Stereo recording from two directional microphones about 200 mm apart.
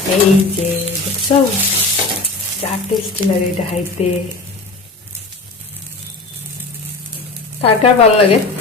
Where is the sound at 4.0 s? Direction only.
30° left (ahead or behind).